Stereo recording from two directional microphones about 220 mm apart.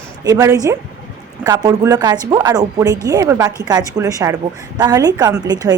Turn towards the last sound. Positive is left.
turn(degrees=-20)  # may be behind; listen again after turning